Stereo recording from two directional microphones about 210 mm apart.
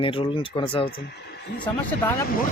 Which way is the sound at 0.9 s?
50° left (ahead or behind).